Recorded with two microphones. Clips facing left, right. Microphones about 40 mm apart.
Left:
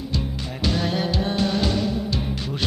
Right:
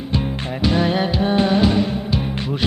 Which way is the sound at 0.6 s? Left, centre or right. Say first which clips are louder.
Right 5 dB; right.